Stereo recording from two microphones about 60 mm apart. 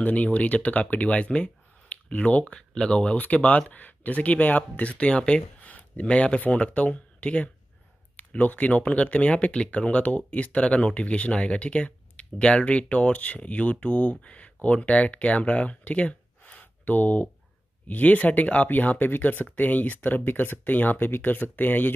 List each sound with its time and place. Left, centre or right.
0.0 s speech: left